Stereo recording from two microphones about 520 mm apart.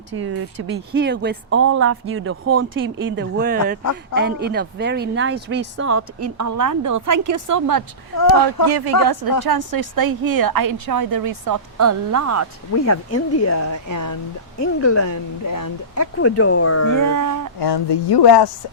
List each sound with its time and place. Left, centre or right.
0.1 s speech: right
12.7 s speech: left
16.1 s speech: left
16.9 s speech: right
17.6 s a woman's voice: left